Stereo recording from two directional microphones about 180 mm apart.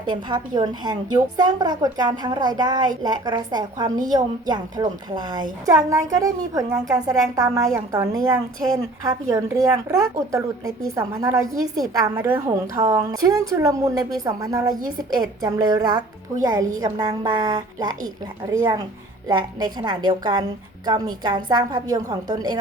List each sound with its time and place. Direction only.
0.1 s a woman's voice: 25° right (ahead or behind)